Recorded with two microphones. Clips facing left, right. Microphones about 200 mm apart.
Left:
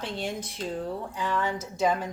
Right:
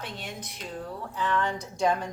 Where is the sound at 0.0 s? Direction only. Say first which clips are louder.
Left 6 dB; 30° left (ahead or behind).